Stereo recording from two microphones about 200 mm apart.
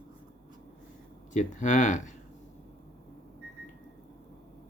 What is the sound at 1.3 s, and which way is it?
Speech, 40° left (ahead or behind).